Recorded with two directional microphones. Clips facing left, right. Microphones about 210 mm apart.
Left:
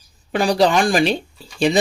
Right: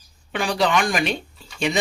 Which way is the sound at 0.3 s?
35° left (ahead or behind).